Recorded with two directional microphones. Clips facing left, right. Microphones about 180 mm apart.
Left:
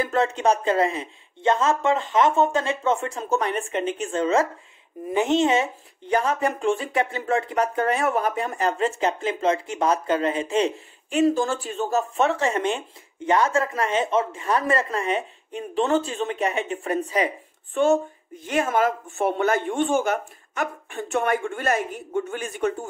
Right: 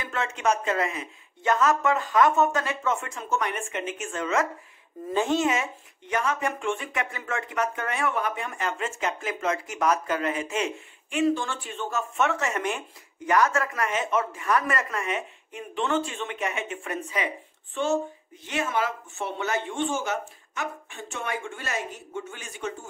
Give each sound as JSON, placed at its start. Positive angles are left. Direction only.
{"t": 0.0, "sound": "speech", "side_deg": 35}
{"t": 5.1, "sound": "speech", "side_deg": 20}
{"t": 18.4, "sound": "speech", "side_deg": 45}